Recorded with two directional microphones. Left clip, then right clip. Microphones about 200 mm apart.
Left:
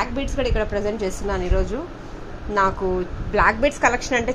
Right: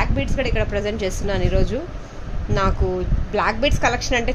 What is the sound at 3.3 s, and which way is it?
A woman's voice, 10° right (ahead or behind).